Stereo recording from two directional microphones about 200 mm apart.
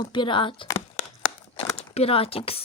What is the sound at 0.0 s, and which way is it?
Speech, 25° left (ahead or behind).